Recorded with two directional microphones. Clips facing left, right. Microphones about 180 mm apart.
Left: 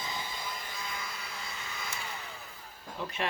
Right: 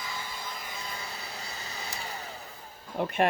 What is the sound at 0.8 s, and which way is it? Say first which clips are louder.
Vacuum cleaner: right 1 dB; 35° right (ahead or behind).